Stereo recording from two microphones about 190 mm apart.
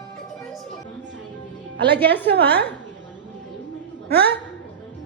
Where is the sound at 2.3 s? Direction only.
60° right (ahead or behind).